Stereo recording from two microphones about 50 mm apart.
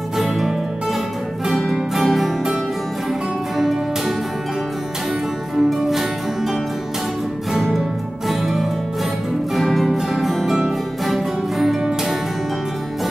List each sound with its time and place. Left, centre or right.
1.5 s music: centre
5.7 s music: centre
7.5 s music: centre